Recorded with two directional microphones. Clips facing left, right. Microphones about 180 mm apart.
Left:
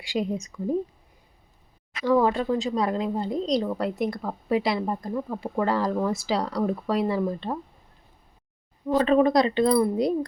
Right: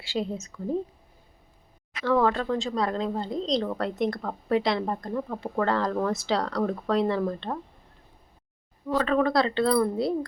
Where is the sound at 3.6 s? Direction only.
5° left (ahead or behind).